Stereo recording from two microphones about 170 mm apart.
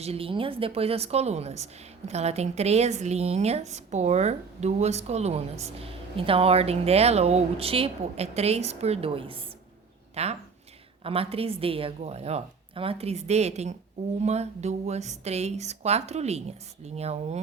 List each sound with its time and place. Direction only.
0.0 s speech: 35° right (ahead or behind)